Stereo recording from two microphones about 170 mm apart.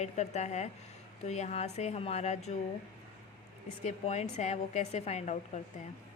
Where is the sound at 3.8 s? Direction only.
40° left (ahead or behind).